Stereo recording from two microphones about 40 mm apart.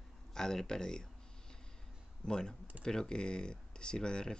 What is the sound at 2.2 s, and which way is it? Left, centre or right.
Speech, centre.